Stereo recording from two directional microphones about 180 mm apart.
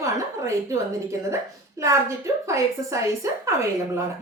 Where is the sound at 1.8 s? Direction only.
15° right (ahead or behind).